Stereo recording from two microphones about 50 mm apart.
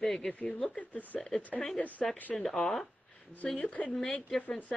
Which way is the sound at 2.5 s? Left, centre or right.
Centre.